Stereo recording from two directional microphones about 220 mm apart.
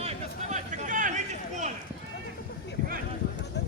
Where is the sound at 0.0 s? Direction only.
30° right (ahead or behind).